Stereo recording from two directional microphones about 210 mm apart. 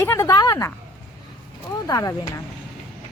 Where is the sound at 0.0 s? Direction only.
15° left (ahead or behind).